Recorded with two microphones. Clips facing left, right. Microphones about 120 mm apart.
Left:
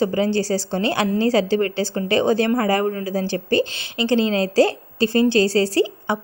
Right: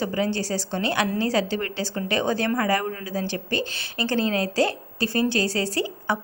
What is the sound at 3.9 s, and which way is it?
A woman's voice, 20° left (ahead or behind).